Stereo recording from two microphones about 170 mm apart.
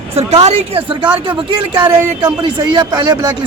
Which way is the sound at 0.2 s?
40° right (ahead or behind).